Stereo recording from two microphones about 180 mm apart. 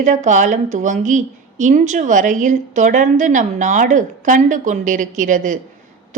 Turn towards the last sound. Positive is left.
turn(degrees=-45)  # may be behind; listen again after turning